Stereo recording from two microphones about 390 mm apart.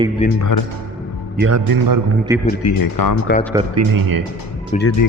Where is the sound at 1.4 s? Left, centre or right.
Right.